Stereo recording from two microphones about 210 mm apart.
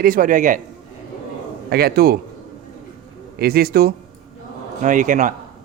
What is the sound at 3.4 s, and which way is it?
A man's voice, 45° right (ahead or behind).